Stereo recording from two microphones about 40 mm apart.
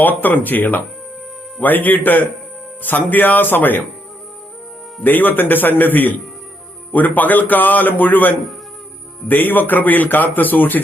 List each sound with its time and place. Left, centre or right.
0.0 s a man's voice: left
5.0 s a man's voice: left